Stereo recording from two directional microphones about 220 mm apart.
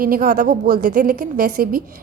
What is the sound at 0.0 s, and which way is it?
A woman's voice, 40° right (ahead or behind).